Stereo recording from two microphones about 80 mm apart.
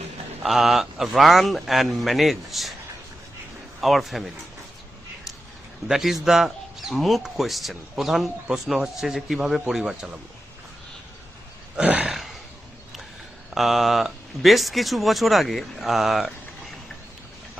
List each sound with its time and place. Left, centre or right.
0.4 s speech: centre
3.8 s speech: centre
5.9 s speech: centre
11.8 s a sound: centre
13.5 s speech: centre